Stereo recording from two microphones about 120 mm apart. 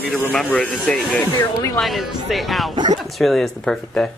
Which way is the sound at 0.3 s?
5° left (ahead or behind).